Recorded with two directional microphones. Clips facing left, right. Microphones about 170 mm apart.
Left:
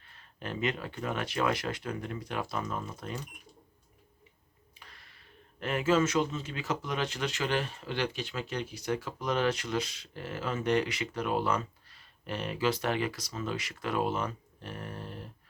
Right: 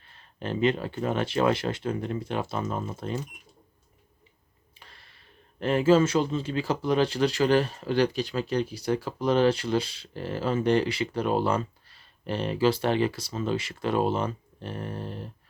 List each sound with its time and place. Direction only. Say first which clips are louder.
0.1 s speech: right 7 dB; 30° right (ahead or behind)
4.8 s speech: right 2 dB; 30° right (ahead or behind)